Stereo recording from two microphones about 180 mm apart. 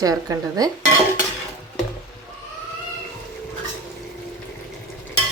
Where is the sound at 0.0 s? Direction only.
20° right (ahead or behind).